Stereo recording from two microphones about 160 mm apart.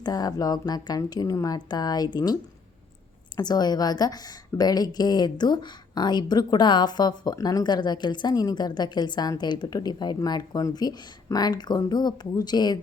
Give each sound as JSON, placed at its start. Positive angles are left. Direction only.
{"t": 0.0, "sound": "a woman's voice", "side_deg": 25}